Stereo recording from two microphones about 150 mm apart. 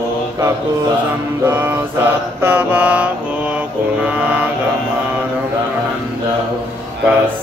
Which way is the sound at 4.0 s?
10° right (ahead or behind).